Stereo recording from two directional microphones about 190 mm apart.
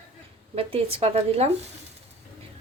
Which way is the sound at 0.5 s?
30° right (ahead or behind).